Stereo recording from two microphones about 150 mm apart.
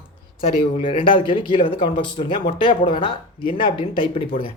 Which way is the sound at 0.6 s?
35° left (ahead or behind).